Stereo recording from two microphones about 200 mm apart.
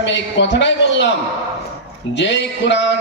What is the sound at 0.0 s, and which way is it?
A man's voice, 65° left (ahead or behind).